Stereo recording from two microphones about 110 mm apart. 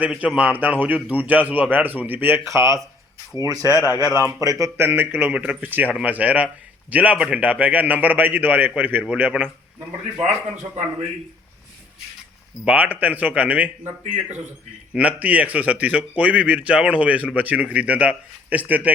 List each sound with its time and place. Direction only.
0.0 s a man's voice: 10° right (ahead or behind); by 2.8 s 25° right (ahead or behind)
3.6 s speech: 30° left (ahead or behind)
4.3 s speech: 35° right (ahead or behind)
4.6 s a man's voice: 20° right (ahead or behind)
12.6 s a man's voice: 15° right (ahead or behind)